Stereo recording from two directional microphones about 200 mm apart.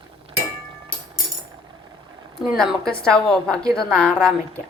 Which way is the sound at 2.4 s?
Centre (ahead or behind).